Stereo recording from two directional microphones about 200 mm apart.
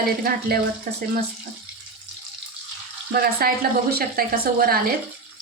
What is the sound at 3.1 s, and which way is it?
Speech, 50° right (ahead or behind).